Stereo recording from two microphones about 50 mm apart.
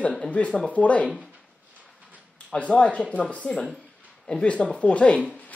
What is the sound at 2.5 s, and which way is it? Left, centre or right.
A woman's voice, left.